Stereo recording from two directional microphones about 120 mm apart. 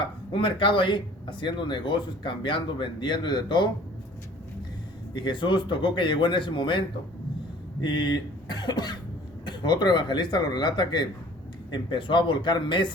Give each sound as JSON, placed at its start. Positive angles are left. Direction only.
{"t": 0.3, "sound": "speech", "side_deg": 45}
{"t": 5.1, "sound": "speech", "side_deg": 40}